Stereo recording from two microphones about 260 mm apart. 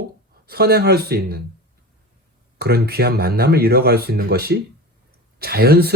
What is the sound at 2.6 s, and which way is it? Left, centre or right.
A man's voice, right.